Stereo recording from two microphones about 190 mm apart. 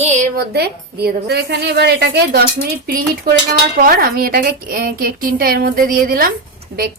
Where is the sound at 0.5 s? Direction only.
55° right (ahead or behind).